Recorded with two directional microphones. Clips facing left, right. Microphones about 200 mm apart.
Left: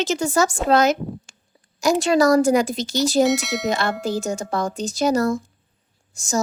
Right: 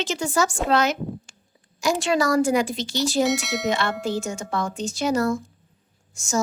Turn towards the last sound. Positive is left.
turn(degrees=35)  # may be behind; listen again after turning